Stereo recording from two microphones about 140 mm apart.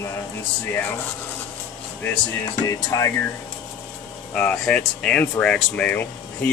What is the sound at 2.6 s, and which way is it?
Speech, 20° left (ahead or behind).